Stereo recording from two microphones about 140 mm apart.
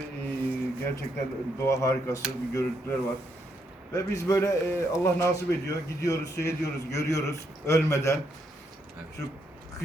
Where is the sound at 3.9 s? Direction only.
20° left (ahead or behind).